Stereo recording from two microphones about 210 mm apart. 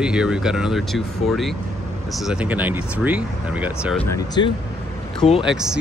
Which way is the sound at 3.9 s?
15° left (ahead or behind).